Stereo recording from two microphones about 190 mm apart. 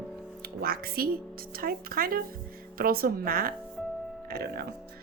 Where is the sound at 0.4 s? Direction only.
50° right (ahead or behind).